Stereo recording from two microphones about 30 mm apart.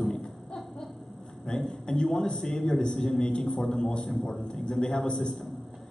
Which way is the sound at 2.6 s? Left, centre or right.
Left.